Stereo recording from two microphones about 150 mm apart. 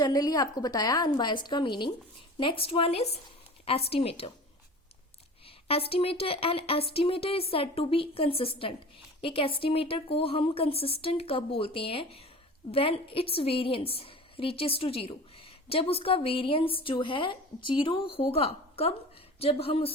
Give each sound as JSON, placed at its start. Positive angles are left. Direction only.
{"t": 0.0, "sound": "a woman's voice", "side_deg": 25}
{"t": 5.6, "sound": "speech", "side_deg": 40}